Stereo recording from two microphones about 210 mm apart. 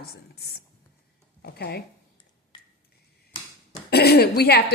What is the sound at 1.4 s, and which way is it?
Speech, 50° left (ahead or behind).